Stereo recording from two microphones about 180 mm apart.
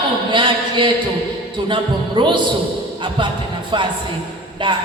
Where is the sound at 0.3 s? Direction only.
25° right (ahead or behind).